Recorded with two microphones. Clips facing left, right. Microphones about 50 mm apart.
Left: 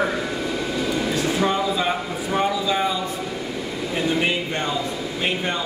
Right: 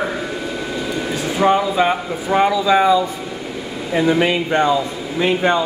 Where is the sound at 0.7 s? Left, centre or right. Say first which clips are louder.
Even; centre.